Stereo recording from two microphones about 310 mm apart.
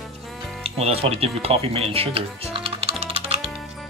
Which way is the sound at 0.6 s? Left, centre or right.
Centre.